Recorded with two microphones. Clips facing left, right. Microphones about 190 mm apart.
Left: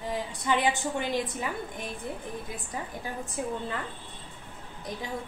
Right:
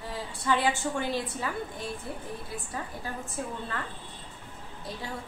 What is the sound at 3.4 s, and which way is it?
Speech, 15° left (ahead or behind).